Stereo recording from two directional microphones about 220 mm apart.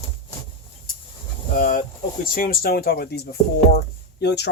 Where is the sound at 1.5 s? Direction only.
35° left (ahead or behind).